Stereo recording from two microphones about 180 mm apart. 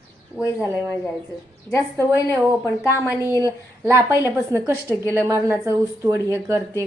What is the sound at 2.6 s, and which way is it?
Speech, 15° left (ahead or behind).